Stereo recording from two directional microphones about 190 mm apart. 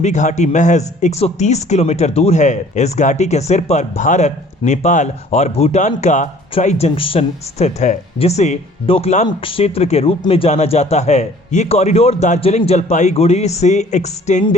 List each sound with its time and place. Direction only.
0.0 s a man's voice: 40° left (ahead or behind)